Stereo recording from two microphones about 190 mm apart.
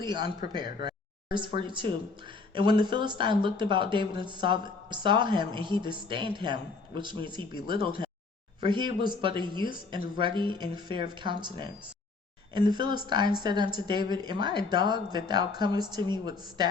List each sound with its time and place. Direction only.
0.0 s speech: 25° right (ahead or behind)
12.5 s speech: 25° right (ahead or behind)